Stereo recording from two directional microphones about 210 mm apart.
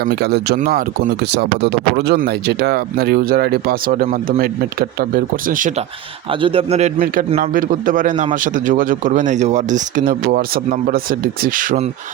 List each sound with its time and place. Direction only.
0.0 s speech: 50° right (ahead or behind)
6.4 s a man's voice: 25° right (ahead or behind)